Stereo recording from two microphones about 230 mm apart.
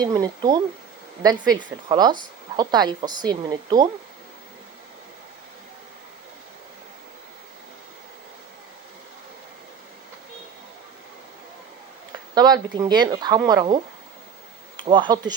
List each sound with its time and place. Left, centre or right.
0.0 s a woman's voice: centre
12.3 s a woman's voice: centre